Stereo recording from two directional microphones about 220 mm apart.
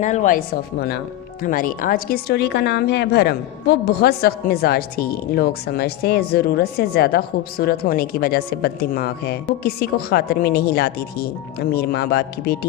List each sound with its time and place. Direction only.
0.0 s speech: 35° left (ahead or behind)